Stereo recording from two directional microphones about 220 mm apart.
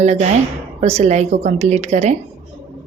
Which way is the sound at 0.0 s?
30° right (ahead or behind).